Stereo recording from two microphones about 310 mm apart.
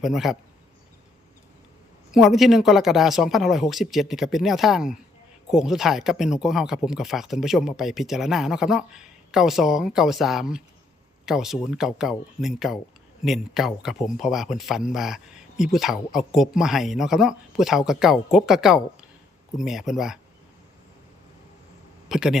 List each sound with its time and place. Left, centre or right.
0.0 s speech: centre
2.1 s speech: centre
22.1 s speech: centre